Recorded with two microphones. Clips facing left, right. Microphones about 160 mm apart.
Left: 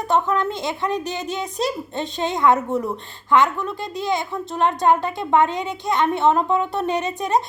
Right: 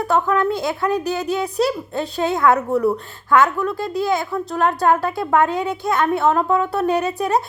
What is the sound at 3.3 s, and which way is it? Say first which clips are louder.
Speech: right 2 dB; 5° right (ahead or behind).